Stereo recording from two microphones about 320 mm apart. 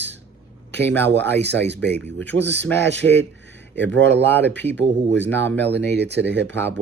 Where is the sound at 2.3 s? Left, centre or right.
Right.